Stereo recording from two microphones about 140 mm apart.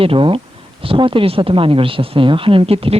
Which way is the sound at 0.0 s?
40° right (ahead or behind).